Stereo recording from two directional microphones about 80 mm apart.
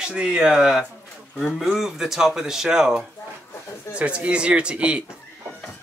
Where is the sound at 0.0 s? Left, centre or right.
Centre.